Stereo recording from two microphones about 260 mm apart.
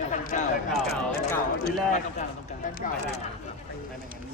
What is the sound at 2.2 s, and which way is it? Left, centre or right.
Speech, left.